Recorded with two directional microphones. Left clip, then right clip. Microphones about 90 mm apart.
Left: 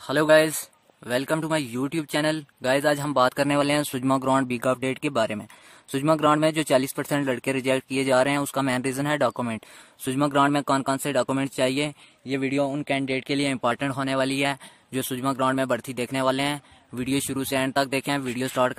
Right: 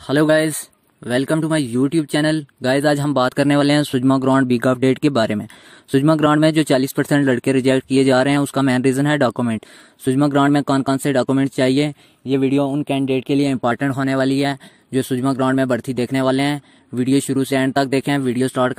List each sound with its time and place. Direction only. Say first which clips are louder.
0.0 s speech: right 3 dB; 45° right (ahead or behind)
4.6 s speech: right 8 dB; 55° right (ahead or behind)
5.9 s speech: right 5 dB; 45° right (ahead or behind)
10.0 s speech: right 5 dB; 35° right (ahead or behind)
12.3 s speech: right 9 dB; 35° left (ahead or behind)
12.5 s speech: right 6 dB; 25° right (ahead or behind)
12.8 s speech: right 6 dB; 35° right (ahead or behind)
18.5 s speech: even; 25° right (ahead or behind)